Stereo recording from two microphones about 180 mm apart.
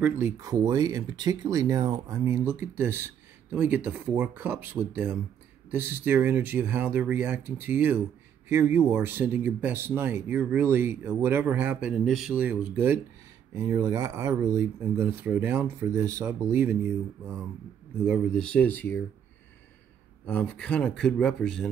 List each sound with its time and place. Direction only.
0.0 s speech: 15° right (ahead or behind); by 18.9 s 10° left (ahead or behind)
20.2 s speech: 5° left (ahead or behind)